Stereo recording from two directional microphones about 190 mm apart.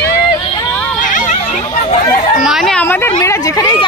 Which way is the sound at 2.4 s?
Centre (ahead or behind).